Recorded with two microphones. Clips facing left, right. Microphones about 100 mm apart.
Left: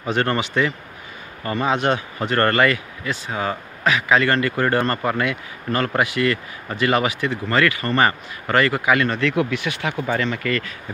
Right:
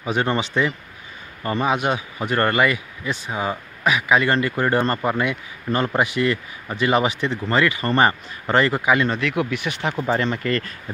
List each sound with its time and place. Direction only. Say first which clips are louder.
0.0 s speech: left 1 dB; 15° right (ahead or behind)
1.4 s speech: even; 20° right (ahead or behind)
10.2 s speech: right 1 dB; 30° right (ahead or behind)